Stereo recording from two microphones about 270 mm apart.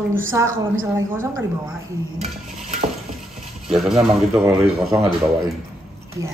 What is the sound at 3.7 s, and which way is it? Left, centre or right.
Speech, centre.